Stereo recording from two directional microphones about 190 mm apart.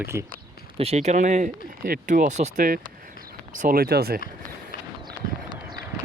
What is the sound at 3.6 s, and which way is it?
Speech, 50° right (ahead or behind).